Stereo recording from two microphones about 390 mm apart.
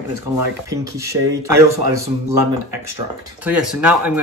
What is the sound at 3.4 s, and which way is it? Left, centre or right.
Speech, centre.